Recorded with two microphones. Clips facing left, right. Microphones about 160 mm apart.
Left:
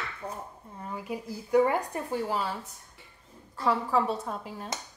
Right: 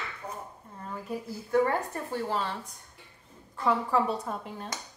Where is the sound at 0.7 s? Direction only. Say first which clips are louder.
Even; 10° left (ahead or behind).